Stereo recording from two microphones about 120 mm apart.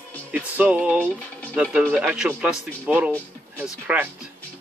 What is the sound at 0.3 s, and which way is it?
Music, 10° right (ahead or behind).